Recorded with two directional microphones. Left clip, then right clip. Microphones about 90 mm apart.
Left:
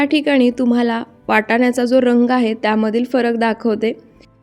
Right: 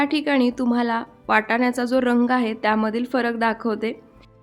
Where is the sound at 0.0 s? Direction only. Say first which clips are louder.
Left 6 dB; 30° left (ahead or behind).